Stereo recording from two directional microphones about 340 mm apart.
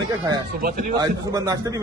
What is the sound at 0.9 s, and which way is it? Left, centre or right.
Speech, centre.